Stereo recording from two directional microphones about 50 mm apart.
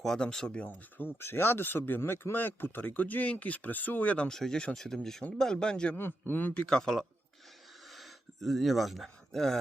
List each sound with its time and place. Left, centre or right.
0.0 s speech: centre
0.6 s speech: left
2.8 s speech: left
4.3 s speech: centre
6.0 s speech: left
6.7 s speech: centre